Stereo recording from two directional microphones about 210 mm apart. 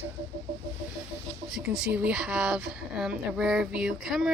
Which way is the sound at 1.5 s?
Centre (ahead or behind).